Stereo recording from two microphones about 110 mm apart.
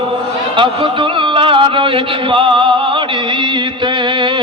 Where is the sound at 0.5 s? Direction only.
50° right (ahead or behind).